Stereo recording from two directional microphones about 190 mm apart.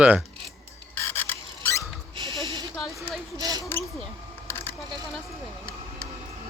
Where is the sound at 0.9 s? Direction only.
10° left (ahead or behind).